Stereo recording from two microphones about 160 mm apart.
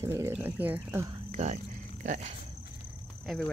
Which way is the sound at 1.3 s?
45° right (ahead or behind).